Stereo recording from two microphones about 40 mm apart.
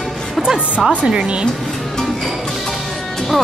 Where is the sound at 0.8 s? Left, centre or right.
Right.